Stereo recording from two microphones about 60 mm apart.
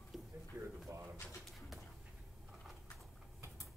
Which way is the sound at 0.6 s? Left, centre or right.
Right.